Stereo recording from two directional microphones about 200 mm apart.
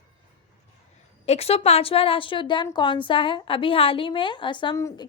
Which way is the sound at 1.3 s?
30° left (ahead or behind).